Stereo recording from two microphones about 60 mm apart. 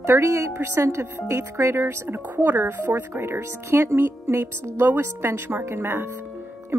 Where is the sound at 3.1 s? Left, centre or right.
Right.